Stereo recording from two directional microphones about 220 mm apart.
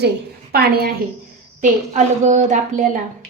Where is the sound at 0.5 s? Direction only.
45° right (ahead or behind).